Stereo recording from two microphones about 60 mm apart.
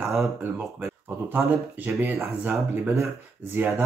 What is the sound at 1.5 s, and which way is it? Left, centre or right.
Speech, right.